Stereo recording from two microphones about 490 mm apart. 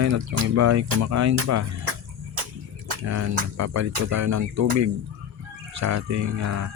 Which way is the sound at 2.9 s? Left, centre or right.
Right.